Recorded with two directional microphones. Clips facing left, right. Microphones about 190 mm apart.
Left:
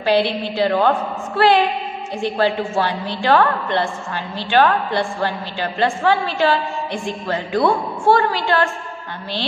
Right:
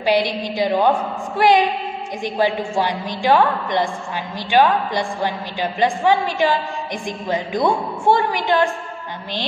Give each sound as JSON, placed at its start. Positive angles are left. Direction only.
{"t": 0.0, "sound": "a woman's voice", "side_deg": -15}